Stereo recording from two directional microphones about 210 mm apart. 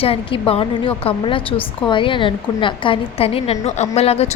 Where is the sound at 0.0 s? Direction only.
25° left (ahead or behind).